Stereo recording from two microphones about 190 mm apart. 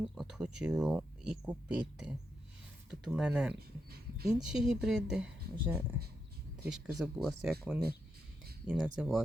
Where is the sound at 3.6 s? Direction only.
55° right (ahead or behind).